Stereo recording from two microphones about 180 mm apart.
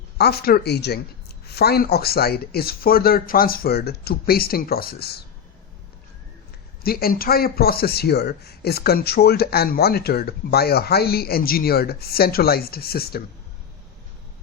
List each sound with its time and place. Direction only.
0.2 s speech: 60° left (ahead or behind)
6.8 s speech: 55° left (ahead or behind)